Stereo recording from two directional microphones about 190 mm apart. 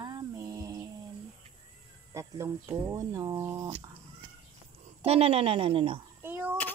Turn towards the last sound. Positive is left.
turn(degrees=-10)  # may be behind; listen again after turning